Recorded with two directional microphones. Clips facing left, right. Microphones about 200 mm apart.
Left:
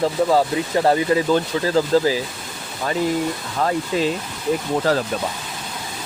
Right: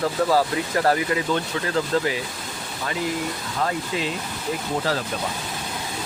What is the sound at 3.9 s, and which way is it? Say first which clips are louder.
Speech: left 9 dB; 40° left (ahead or behind).